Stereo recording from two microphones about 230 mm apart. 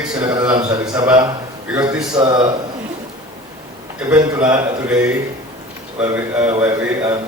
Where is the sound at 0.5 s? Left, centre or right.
Centre.